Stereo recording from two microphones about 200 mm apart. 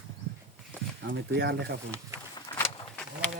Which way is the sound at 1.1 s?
55° right (ahead or behind).